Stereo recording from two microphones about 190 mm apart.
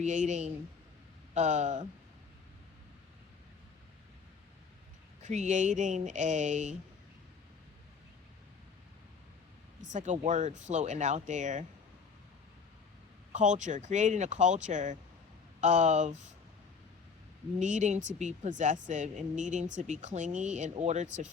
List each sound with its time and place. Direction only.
0.0 s speech: 40° right (ahead or behind)
5.2 s speech: 40° right (ahead or behind)
9.8 s speech: 40° right (ahead or behind)
13.3 s speech: 40° right (ahead or behind)
17.6 s speech: 40° right (ahead or behind)